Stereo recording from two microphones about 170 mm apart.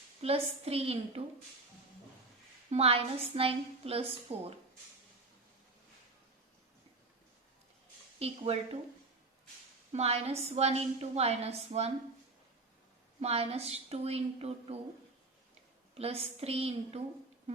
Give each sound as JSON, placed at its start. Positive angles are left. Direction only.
{"t": 0.2, "sound": "a woman's voice", "side_deg": -35}
{"t": 2.6, "sound": "a woman's voice", "side_deg": -35}
{"t": 8.2, "sound": "a woman's voice", "side_deg": -35}
{"t": 9.9, "sound": "a woman's voice", "side_deg": -40}
{"t": 13.1, "sound": "a woman's voice", "side_deg": -35}
{"t": 16.0, "sound": "a woman's voice", "side_deg": -35}